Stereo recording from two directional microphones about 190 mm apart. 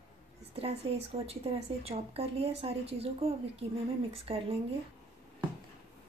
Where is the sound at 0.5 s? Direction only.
30° right (ahead or behind).